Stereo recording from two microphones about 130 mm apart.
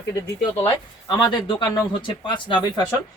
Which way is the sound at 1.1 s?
35° left (ahead or behind).